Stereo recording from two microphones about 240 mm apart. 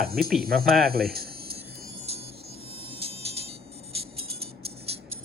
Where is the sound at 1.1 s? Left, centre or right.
Right.